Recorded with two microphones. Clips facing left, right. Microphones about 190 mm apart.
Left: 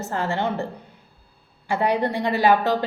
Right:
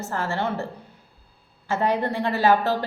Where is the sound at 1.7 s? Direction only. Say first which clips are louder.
Left 1 dB; 15° left (ahead or behind).